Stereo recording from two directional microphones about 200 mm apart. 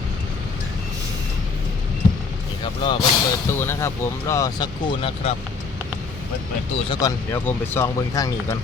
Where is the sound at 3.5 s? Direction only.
10° left (ahead or behind).